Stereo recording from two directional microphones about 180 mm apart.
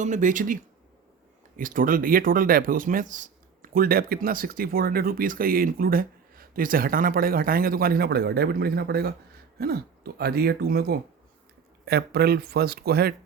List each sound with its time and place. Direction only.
0.0 s speech: 45° right (ahead or behind); by 13.1 s 60° right (ahead or behind)